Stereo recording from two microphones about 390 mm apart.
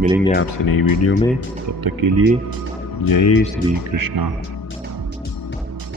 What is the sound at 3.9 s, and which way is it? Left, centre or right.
Speech, right.